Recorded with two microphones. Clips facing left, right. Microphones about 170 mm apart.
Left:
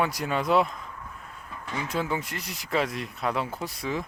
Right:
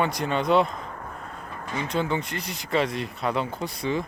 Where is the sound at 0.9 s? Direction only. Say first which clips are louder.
Right 6 dB; 60° right (ahead or behind).